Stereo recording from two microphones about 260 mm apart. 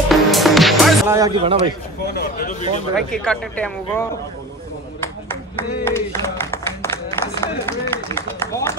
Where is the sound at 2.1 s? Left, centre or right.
Left.